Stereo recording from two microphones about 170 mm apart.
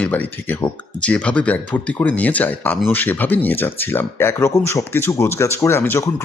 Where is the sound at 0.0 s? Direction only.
10° left (ahead or behind).